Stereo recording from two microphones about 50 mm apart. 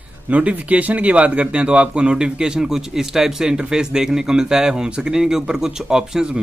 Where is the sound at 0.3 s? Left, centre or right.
Right.